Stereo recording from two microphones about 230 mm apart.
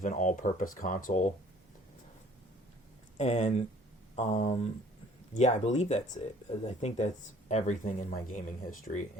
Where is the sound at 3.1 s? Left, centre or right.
Left.